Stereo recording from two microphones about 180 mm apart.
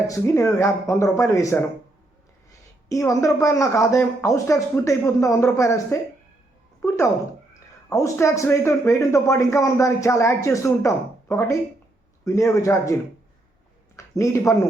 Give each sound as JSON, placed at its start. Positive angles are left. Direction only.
{"t": 0.1, "sound": "a man's voice", "side_deg": 15}
{"t": 2.9, "sound": "a man's voice", "side_deg": 15}
{"t": 14.0, "sound": "a sound", "side_deg": 15}
{"t": 14.5, "sound": "a man's voice", "side_deg": 15}